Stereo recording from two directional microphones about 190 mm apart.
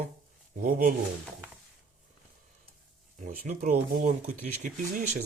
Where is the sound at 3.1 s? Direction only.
45° right (ahead or behind).